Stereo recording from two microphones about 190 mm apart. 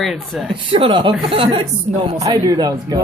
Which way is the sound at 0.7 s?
25° right (ahead or behind).